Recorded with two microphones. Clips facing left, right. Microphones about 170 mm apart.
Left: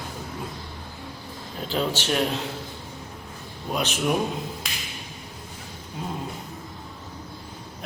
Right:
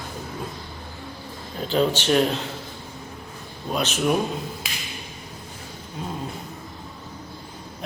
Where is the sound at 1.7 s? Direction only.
5° left (ahead or behind).